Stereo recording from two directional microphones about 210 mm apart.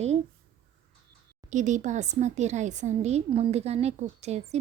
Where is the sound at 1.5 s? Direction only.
35° right (ahead or behind).